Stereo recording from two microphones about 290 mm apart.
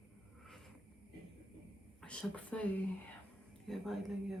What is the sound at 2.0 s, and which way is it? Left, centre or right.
Speech, centre.